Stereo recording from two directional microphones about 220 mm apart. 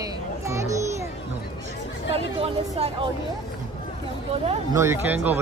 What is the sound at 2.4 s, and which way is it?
Speech, 25° right (ahead or behind).